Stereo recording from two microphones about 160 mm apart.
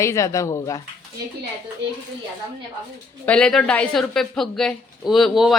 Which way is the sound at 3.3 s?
5° left (ahead or behind).